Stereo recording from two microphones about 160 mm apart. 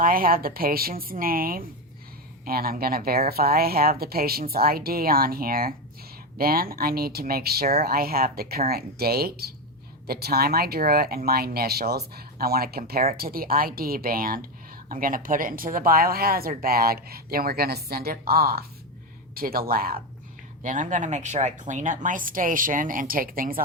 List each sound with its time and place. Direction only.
0.0 s speech: 65° right (ahead or behind)
20.6 s speech: 50° right (ahead or behind)